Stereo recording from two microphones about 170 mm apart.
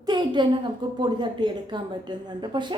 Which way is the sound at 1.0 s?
25° right (ahead or behind).